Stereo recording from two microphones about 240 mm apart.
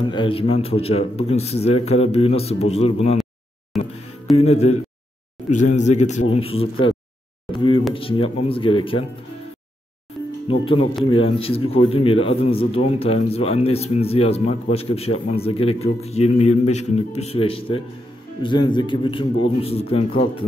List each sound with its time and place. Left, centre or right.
0.1 s speech: left
3.7 s music: centre
4.4 s speech: left
10.6 s speech: left